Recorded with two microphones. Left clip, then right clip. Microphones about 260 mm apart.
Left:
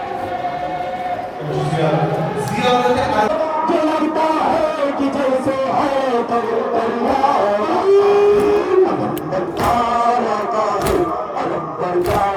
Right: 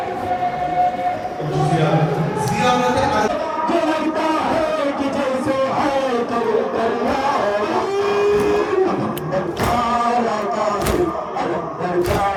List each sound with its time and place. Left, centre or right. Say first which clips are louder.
3.7 s a sound: left 2 dB; left
5.5 s music: left 1 dB; left
9.6 s music: left 3 dB; left